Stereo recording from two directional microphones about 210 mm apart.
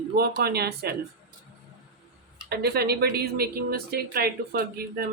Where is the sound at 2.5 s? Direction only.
50° right (ahead or behind).